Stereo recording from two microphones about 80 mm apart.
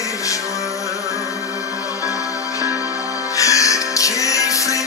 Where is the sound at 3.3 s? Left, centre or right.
Left.